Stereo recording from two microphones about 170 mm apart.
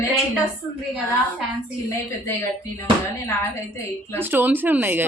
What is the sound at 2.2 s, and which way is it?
Speech, 15° left (ahead or behind).